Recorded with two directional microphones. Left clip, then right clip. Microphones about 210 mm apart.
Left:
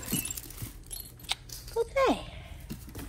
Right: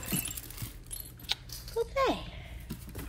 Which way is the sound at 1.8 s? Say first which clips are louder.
Left 3 dB; 25° left (ahead or behind).